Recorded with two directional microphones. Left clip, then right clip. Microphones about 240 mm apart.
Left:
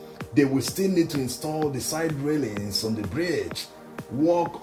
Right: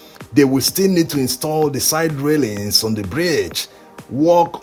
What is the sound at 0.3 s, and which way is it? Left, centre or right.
Speech, right.